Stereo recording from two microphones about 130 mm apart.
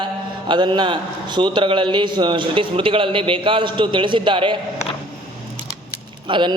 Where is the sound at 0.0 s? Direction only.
35° right (ahead or behind).